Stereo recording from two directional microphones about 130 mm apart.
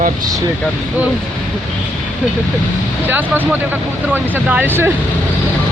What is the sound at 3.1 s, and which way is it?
Speech, 15° right (ahead or behind).